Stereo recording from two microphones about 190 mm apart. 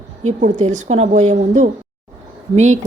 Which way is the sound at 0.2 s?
40° right (ahead or behind).